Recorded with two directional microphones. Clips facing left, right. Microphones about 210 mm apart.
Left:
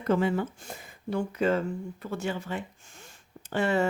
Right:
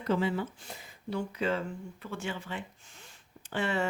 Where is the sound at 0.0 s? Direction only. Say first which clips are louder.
Left 4 dB; 50° left (ahead or behind).